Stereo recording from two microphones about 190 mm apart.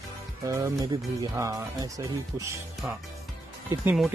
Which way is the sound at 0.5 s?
15° right (ahead or behind).